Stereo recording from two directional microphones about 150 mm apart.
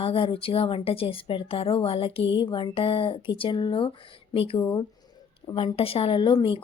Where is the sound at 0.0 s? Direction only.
35° left (ahead or behind).